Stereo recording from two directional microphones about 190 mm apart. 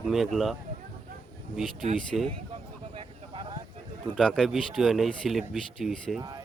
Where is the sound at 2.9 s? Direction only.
25° right (ahead or behind).